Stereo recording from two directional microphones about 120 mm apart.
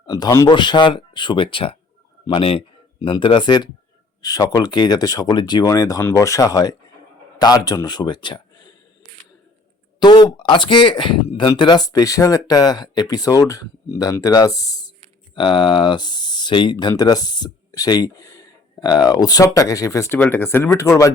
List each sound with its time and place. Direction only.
0.0 s speech: 35° left (ahead or behind)
10.0 s speech: 35° left (ahead or behind)
15.4 s speech: 45° left (ahead or behind)
16.7 s speech: 30° left (ahead or behind)